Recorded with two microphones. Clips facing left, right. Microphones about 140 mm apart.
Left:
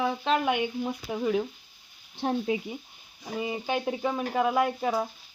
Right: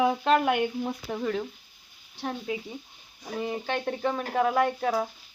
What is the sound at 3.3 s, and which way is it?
Speech, 5° left (ahead or behind).